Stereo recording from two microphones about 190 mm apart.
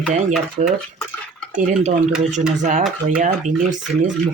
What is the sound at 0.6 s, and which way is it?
Speech, 35° right (ahead or behind).